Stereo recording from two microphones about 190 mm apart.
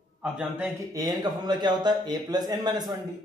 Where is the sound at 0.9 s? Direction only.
20° right (ahead or behind).